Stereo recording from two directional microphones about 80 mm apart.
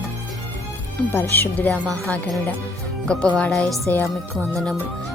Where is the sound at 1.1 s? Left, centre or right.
Left.